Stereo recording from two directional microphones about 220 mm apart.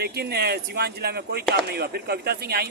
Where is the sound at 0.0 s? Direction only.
45° right (ahead or behind).